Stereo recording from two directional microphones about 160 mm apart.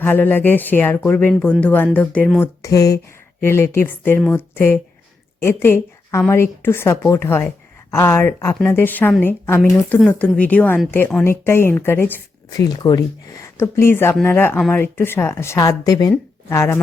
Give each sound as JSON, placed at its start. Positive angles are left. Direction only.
{"t": 0.0, "sound": "a woman's voice", "side_deg": 10}
{"t": 2.4, "sound": "a woman's voice", "side_deg": 20}
{"t": 12.5, "sound": "a woman's voice", "side_deg": 25}